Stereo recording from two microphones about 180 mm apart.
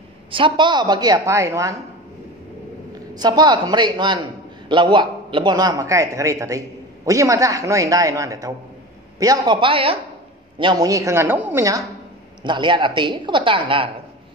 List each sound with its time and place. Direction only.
0.3 s a man's voice: 25° right (ahead or behind)
3.2 s a man's voice: 25° right (ahead or behind)